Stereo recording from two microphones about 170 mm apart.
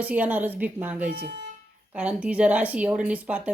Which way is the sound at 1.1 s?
90° right.